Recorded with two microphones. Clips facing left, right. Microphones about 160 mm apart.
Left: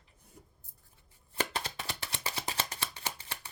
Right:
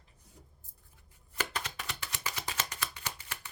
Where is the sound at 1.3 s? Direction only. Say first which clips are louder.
Left 3 dB; 30° left (ahead or behind).